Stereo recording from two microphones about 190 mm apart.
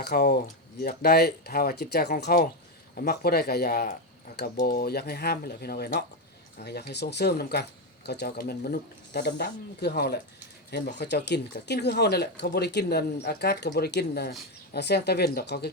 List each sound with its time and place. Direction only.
0.0 s speech: 55° left (ahead or behind)